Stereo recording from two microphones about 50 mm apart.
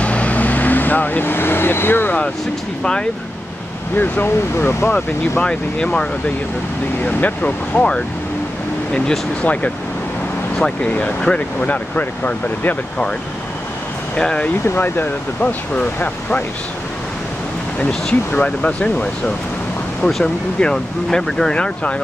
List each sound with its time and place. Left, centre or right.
0.0 s vehicle: left
2.8 s speech: centre
3.9 s speech: left
5.4 s speech: left
7.0 s speech: left
9.4 s speech: left
14.1 s speech: centre
14.8 s speech: left
18.4 s speech: left
20.5 s speech: centre